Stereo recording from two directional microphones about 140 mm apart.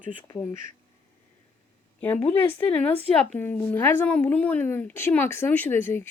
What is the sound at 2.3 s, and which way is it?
A woman's voice, 15° left (ahead or behind).